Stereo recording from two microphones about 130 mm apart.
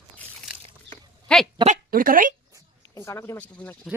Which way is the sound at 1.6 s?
85° right.